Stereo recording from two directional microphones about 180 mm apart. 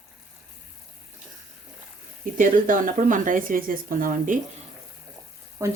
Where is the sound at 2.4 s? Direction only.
50° right (ahead or behind).